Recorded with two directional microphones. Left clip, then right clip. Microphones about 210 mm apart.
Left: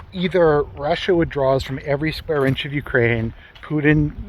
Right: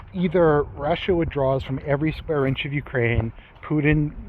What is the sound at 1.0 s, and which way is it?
Speech, 35° left (ahead or behind).